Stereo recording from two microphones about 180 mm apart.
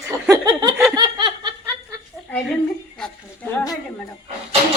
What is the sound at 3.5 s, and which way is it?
Speech, 20° left (ahead or behind).